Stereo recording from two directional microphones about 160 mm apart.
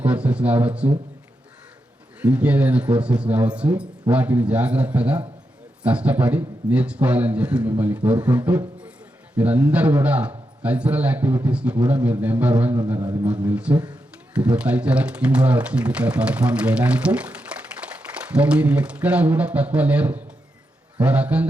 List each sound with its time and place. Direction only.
0.0 s speech: 10° right (ahead or behind)
2.2 s speech: 10° right (ahead or behind)